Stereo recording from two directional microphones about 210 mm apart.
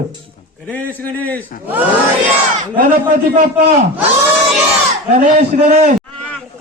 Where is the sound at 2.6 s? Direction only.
40° right (ahead or behind).